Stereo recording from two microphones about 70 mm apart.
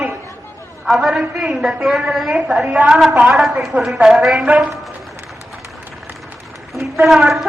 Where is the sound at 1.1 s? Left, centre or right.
Centre.